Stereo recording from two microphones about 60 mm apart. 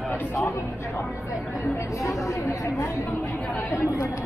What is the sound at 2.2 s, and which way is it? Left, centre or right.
Speech, left.